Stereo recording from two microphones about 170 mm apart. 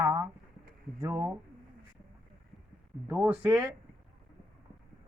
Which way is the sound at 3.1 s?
10° right (ahead or behind).